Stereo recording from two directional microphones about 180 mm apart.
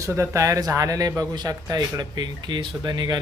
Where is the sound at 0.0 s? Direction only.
15° right (ahead or behind).